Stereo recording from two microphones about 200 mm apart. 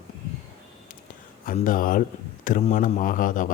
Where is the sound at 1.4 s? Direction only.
45° left (ahead or behind).